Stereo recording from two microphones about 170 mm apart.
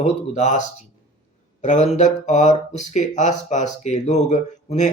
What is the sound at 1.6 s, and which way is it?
Speech, 40° left (ahead or behind).